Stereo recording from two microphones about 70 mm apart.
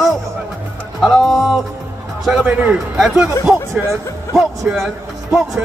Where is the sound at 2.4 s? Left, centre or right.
Right.